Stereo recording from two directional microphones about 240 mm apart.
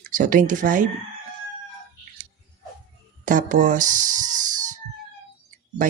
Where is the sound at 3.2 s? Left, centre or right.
Right.